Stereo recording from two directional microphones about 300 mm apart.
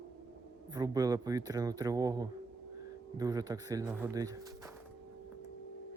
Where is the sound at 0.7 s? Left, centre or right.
Centre.